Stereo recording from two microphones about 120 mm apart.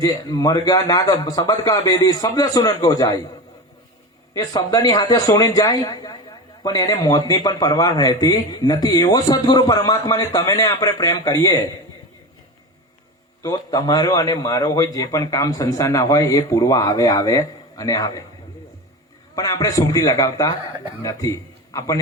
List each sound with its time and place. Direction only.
0.0 s speech: 30° left (ahead or behind)
4.4 s speech: 30° left (ahead or behind)
13.4 s a man's voice: 30° left (ahead or behind)
19.4 s a man's voice: 30° left (ahead or behind)